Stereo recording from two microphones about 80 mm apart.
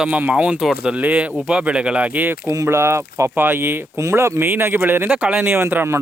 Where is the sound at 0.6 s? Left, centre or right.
Centre.